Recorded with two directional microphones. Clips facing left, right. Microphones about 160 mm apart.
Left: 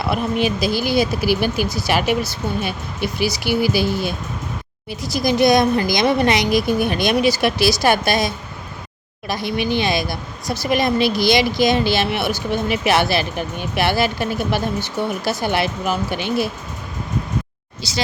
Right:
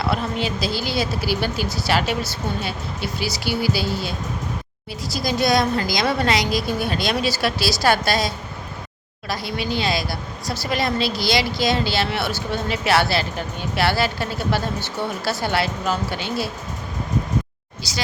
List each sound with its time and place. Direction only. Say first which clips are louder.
0.0 s speech: left 4 dB; 15° left (ahead or behind)
17.8 s speech: left 5 dB; 25° left (ahead or behind)